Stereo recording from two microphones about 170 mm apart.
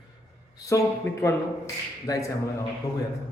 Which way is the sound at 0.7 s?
15° left (ahead or behind).